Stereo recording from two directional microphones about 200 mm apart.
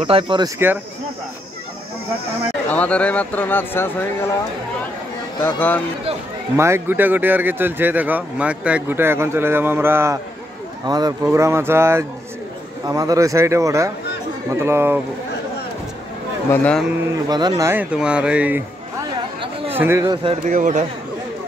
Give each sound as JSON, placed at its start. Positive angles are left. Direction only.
{"t": 0.0, "sound": "speech", "side_deg": -25}
{"t": 2.7, "sound": "speech", "side_deg": 5}
{"t": 5.4, "sound": "speech", "side_deg": 10}
{"t": 6.5, "sound": "speech", "side_deg": -15}
{"t": 16.4, "sound": "speech", "side_deg": 5}
{"t": 17.3, "sound": "speech", "side_deg": -20}
{"t": 20.4, "sound": "speech", "side_deg": -40}